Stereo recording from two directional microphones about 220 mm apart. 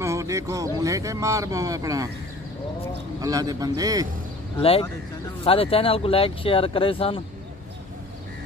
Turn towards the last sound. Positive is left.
turn(degrees=25)  # may be behind; listen again after turning